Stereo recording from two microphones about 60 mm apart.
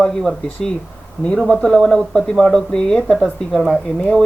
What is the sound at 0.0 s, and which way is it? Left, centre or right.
Speech, centre.